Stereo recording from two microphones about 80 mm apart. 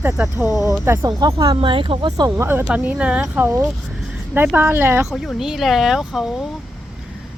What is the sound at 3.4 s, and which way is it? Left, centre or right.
Speech, right.